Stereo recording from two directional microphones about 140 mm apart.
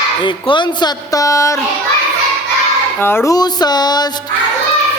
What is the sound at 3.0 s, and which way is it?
A woman's voice, 15° left (ahead or behind).